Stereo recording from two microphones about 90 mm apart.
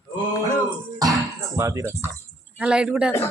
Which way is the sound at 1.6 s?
35° right (ahead or behind).